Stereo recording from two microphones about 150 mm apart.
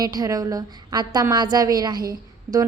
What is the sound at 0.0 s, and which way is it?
A woman's voice, 25° right (ahead or behind).